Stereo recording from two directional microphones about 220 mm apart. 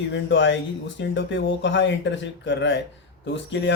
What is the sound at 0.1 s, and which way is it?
Speech, 55° left (ahead or behind).